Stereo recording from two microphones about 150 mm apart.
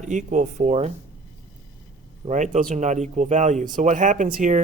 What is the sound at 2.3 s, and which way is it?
Speech, 50° right (ahead or behind).